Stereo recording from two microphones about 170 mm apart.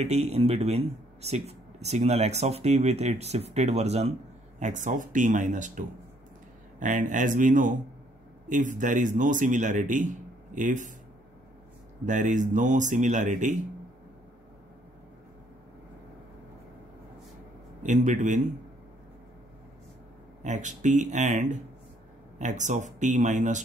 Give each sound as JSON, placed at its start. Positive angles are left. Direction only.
{"t": 0.0, "sound": "a man's voice", "side_deg": -40}
{"t": 12.1, "sound": "a man's voice", "side_deg": -45}
{"t": 17.8, "sound": "a man's voice", "side_deg": -45}
{"t": 20.4, "sound": "a man's voice", "side_deg": -45}